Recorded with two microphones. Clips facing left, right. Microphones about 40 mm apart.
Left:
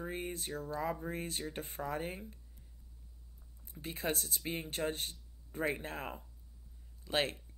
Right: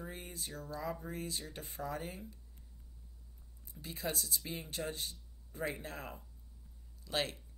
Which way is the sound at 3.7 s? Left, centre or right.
Left.